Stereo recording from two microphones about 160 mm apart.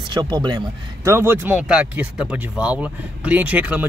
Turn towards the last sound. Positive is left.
turn(degrees=-10)  # may be behind; listen again after turning